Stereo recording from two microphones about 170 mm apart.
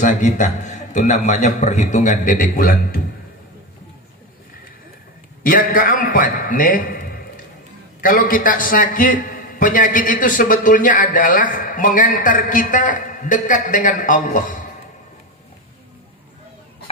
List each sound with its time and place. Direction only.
0.0 s a man's voice: 45° left (ahead or behind)
5.4 s a man's voice: 55° left (ahead or behind)